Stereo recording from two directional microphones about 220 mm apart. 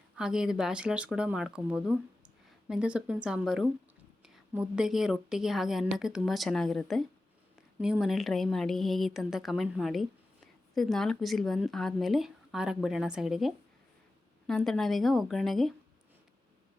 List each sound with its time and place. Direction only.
0.2 s a woman's voice: 5° right (ahead or behind)